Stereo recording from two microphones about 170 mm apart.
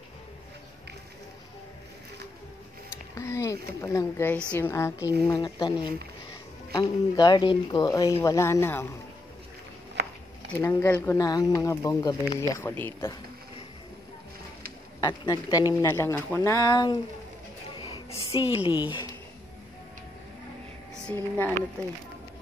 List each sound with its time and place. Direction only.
3.2 s speech: 20° left (ahead or behind)
10.0 s a sound: 80° right
10.5 s speech: 15° left (ahead or behind)
15.0 s speech: 20° left (ahead or behind)
18.1 s a woman's voice: 30° left (ahead or behind)
20.9 s speech: 10° left (ahead or behind)